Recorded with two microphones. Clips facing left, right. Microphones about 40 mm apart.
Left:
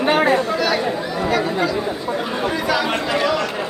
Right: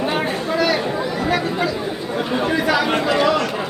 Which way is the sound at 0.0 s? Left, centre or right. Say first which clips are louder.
Left 5 dB; left.